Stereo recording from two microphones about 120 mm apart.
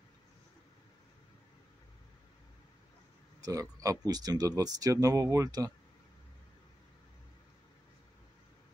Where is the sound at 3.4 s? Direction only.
30° right (ahead or behind).